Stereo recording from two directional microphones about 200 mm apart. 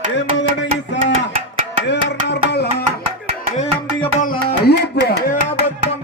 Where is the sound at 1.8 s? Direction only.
60° left (ahead or behind).